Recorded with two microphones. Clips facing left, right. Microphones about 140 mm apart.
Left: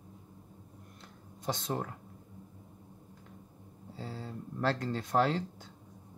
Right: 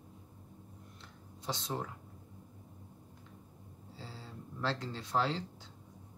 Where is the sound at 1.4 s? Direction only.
50° left (ahead or behind).